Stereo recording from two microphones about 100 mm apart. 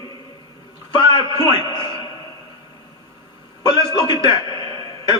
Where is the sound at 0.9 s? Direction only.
45° left (ahead or behind).